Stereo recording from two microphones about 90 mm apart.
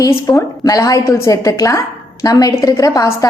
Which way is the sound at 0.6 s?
40° left (ahead or behind).